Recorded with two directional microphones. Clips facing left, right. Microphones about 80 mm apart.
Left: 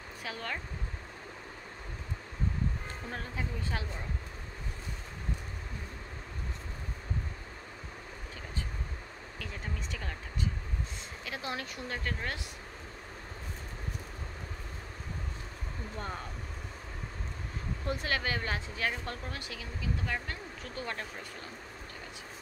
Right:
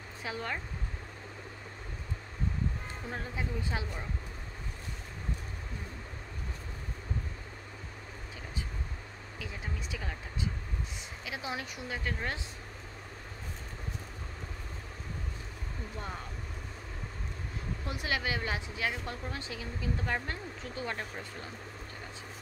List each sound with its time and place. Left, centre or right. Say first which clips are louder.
0.2 s speech: right 2 dB; right
3.1 s speech: right 2 dB; centre
9.4 s speech: even; centre
17.8 s speech: left 1 dB; centre
19.3 s speech: right 2 dB; right